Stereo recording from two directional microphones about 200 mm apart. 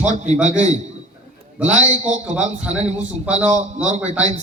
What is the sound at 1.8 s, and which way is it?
Speech, 35° right (ahead or behind).